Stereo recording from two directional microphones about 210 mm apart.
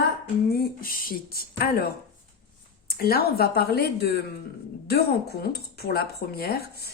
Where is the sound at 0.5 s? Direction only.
45° left (ahead or behind).